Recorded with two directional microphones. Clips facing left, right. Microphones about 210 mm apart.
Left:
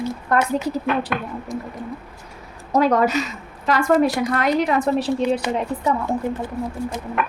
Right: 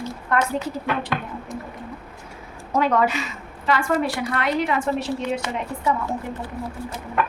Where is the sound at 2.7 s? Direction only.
40° left (ahead or behind).